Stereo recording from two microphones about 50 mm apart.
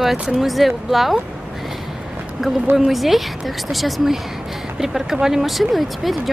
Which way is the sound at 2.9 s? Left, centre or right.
Centre.